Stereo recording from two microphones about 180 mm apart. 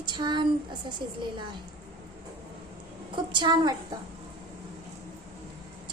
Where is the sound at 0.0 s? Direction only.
25° right (ahead or behind).